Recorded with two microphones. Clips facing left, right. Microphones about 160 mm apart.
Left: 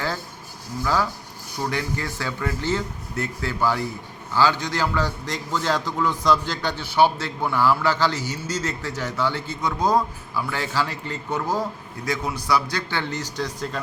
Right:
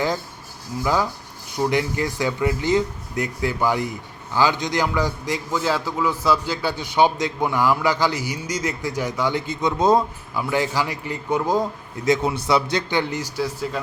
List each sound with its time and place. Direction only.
1.5 s a man's voice: 15° right (ahead or behind)